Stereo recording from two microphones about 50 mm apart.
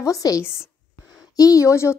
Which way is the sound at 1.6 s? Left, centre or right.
Left.